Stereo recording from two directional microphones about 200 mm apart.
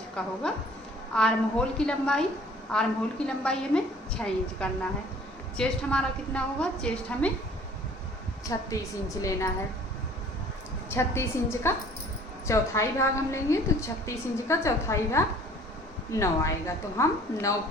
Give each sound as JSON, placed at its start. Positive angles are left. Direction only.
{"t": 0.2, "sound": "a woman's voice", "side_deg": 5}
{"t": 8.4, "sound": "a woman's voice", "side_deg": 15}
{"t": 10.8, "sound": "a woman's voice", "side_deg": 10}